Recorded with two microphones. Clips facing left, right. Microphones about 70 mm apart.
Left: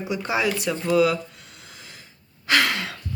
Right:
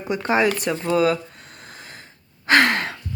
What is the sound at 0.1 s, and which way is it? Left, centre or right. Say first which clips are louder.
Speech: right 5 dB; right.